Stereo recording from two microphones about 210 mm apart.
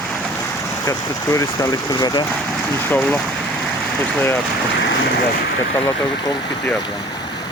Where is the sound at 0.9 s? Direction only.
15° left (ahead or behind).